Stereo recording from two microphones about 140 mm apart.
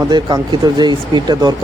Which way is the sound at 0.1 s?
30° right (ahead or behind).